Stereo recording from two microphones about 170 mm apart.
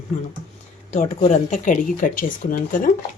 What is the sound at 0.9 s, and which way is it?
Speech, 45° left (ahead or behind).